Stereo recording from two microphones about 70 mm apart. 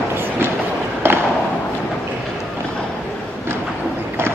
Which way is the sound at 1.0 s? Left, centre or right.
Right.